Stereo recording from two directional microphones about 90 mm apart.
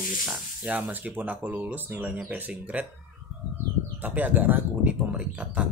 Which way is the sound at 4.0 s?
20° right (ahead or behind).